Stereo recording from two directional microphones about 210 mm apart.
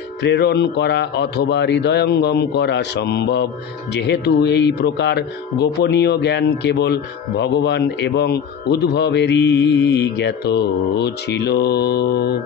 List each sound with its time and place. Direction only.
0.2 s speech: 55° left (ahead or behind)